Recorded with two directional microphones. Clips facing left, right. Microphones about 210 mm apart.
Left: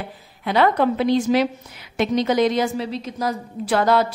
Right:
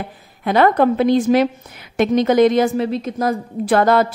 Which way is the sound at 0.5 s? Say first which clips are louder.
Right 4 dB; 50° right (ahead or behind).